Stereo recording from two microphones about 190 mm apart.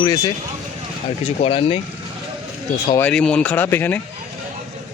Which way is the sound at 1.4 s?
30° left (ahead or behind).